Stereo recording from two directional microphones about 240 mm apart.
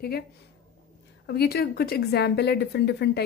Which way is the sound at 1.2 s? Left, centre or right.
Left.